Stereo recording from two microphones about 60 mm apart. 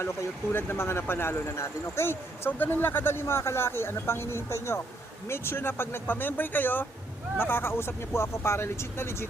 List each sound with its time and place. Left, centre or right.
0.0 s speech: left
2.5 s speech: left